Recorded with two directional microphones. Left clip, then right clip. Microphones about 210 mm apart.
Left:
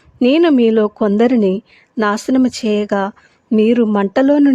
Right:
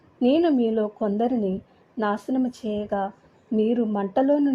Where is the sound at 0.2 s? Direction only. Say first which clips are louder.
Left 9 dB; 30° left (ahead or behind).